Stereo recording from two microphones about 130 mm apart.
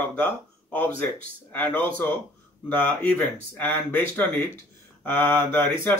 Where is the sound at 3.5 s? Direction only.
15° left (ahead or behind).